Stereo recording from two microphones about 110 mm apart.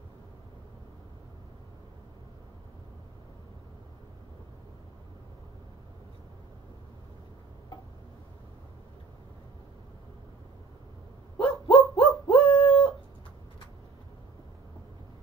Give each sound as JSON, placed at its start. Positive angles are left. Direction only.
{"t": 11.4, "sound": "dog", "side_deg": 55}